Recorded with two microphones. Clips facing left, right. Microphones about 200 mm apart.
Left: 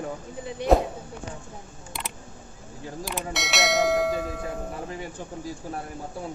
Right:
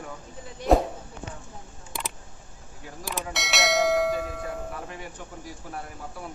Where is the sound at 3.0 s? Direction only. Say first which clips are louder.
Even; centre (ahead or behind).